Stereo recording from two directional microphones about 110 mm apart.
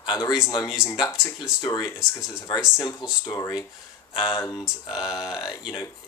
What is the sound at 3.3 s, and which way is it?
Speech, 35° left (ahead or behind).